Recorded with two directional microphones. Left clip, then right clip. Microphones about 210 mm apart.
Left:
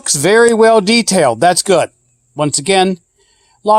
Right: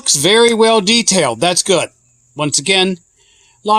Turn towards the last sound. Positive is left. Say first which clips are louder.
# left 3 dB
turn(degrees=30)  # may be behind; listen again after turning